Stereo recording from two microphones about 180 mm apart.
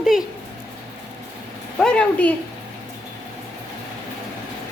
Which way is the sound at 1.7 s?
5° left (ahead or behind).